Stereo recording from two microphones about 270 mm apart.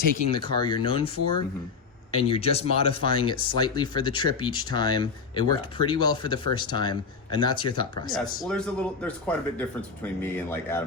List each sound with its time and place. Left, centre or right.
0.3 s speech: centre
2.1 s speech: left
8.4 s speech: centre